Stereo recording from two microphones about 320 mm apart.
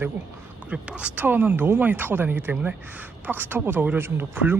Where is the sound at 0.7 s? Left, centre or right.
Centre.